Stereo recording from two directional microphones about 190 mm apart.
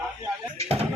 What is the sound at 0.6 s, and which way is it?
Speech, 30° right (ahead or behind).